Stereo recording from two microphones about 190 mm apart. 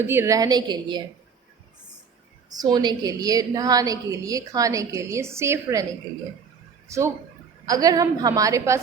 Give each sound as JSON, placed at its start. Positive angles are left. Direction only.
{"t": 0.1, "sound": "a woman's voice", "side_deg": -15}
{"t": 2.6, "sound": "a woman's voice", "side_deg": -20}
{"t": 6.8, "sound": "a woman's voice", "side_deg": -15}